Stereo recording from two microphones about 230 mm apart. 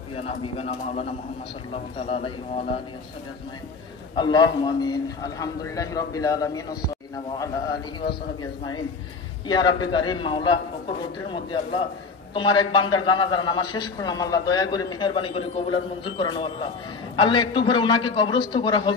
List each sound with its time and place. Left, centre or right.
0.1 s a man's voice: left
4.2 s a man's voice: centre
8.4 s a man's voice: centre